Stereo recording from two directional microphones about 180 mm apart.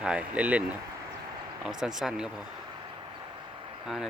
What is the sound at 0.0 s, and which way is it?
Speech, 5° right (ahead or behind).